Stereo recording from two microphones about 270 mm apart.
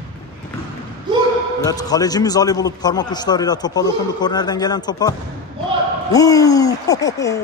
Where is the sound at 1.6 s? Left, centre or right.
Centre.